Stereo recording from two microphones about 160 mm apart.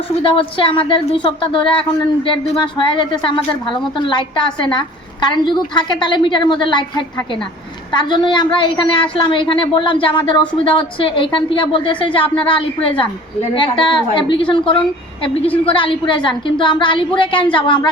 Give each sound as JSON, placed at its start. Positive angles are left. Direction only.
{"t": 0.2, "sound": "a woman's voice", "side_deg": 35}
{"t": 7.9, "sound": "a woman's voice", "side_deg": 30}